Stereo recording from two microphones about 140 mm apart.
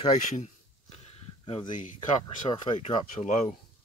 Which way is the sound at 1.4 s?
40° left (ahead or behind).